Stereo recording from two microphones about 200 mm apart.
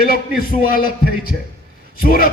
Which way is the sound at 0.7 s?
45° left (ahead or behind).